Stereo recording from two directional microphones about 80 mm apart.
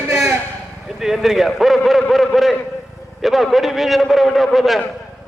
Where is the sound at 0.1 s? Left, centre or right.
Centre.